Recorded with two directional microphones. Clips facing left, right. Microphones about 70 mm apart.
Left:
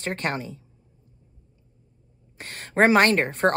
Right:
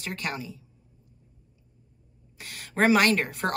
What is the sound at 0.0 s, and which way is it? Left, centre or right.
Speech, left.